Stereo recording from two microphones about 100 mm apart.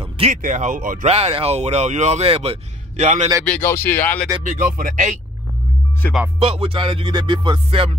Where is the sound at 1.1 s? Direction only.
90° right.